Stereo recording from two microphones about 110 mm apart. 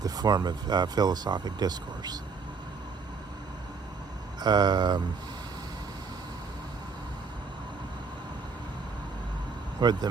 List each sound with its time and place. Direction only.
0.0 s speech: 40° right (ahead or behind)
4.4 s speech: 40° right (ahead or behind)
9.8 s speech: 40° right (ahead or behind)